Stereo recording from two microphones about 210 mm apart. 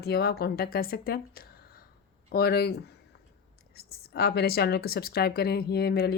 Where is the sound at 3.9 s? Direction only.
50° left (ahead or behind).